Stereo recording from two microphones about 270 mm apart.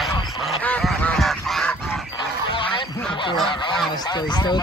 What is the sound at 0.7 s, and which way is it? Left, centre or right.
Goose, centre.